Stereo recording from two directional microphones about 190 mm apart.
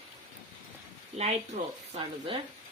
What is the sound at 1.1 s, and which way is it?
Speech, 35° right (ahead or behind).